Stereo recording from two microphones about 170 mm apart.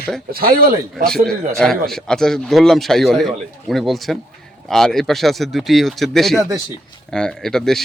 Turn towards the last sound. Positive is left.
turn(degrees=0)  # may be behind; listen again after turning